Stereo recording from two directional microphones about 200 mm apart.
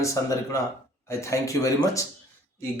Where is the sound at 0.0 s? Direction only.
15° left (ahead or behind).